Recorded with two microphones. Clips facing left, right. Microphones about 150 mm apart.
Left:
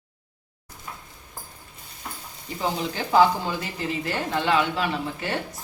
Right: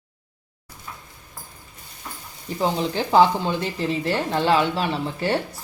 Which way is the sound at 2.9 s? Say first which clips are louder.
Right 1 dB; 30° right (ahead or behind).